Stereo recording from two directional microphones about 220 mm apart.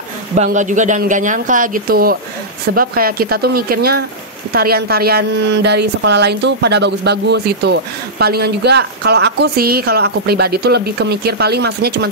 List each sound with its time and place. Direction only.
0.4 s a woman's voice: 35° right (ahead or behind)